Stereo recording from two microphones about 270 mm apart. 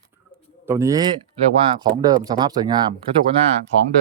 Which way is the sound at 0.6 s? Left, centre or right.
Centre.